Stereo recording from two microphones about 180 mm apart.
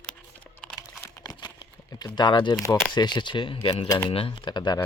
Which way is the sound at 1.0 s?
20° left (ahead or behind).